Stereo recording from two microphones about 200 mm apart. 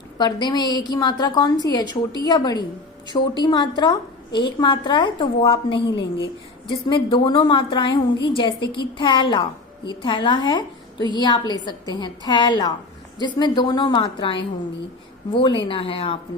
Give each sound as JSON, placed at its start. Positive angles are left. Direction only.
{"t": 0.2, "sound": "a woman's voice", "side_deg": 20}